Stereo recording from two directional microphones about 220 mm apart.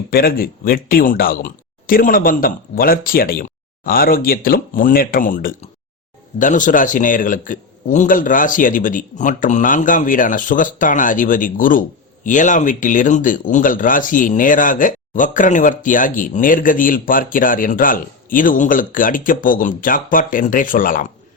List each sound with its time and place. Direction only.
0.1 s a man's voice: 40° left (ahead or behind)